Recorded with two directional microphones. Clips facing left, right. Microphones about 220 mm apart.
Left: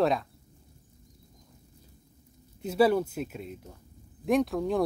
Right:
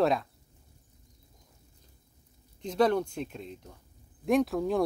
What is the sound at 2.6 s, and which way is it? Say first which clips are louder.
Speech: left 2 dB; 5° left (ahead or behind).